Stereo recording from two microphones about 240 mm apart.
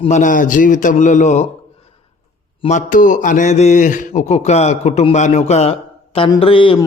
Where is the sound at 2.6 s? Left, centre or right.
Left.